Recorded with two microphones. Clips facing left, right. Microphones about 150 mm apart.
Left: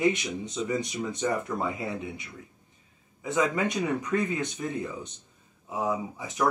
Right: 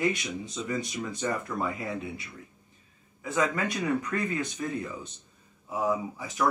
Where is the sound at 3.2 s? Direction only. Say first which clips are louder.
Left 2 dB; 20° left (ahead or behind).